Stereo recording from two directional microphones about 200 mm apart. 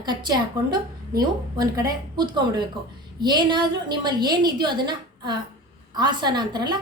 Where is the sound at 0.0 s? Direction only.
20° right (ahead or behind).